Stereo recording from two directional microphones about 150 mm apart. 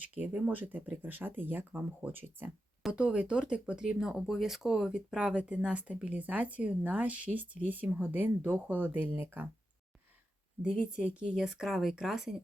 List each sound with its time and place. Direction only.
0.1 s speech: 10° right (ahead or behind)
10.6 s speech: 5° right (ahead or behind)